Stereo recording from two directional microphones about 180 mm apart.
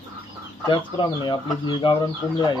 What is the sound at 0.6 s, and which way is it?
Speech, 25° left (ahead or behind).